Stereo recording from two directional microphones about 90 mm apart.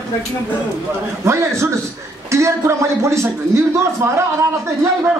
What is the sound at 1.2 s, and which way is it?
A man's voice, 30° right (ahead or behind).